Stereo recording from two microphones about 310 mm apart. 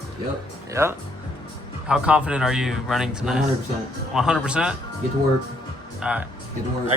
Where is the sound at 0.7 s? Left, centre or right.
Centre.